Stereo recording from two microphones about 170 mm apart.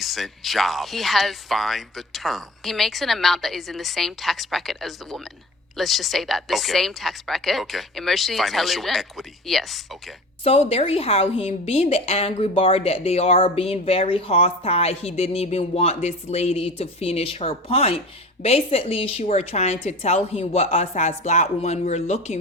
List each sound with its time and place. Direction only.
0.0 s speech: centre (ahead or behind)
10.4 s a woman's voice: 35° left (ahead or behind)